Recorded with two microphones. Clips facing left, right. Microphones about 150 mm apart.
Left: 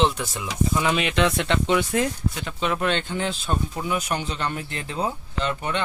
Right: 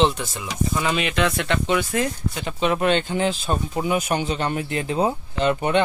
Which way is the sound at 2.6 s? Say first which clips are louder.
Right 4 dB; 10° right (ahead or behind).